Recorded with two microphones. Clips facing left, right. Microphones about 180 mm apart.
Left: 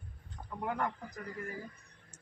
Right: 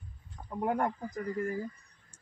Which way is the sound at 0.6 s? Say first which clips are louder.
Right 5 dB; 40° right (ahead or behind).